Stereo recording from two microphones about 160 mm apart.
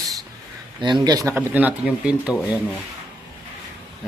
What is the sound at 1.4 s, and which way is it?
Speech, 10° right (ahead or behind).